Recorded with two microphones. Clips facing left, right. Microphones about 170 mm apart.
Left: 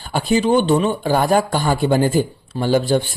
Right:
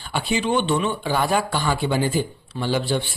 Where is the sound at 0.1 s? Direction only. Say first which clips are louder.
Left 6 dB; 40° left (ahead or behind).